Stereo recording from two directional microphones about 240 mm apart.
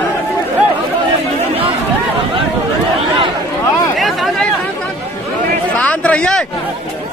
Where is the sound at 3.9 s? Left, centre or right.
Centre.